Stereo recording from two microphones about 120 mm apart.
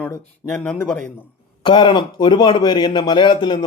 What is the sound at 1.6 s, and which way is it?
Speech, 40° left (ahead or behind).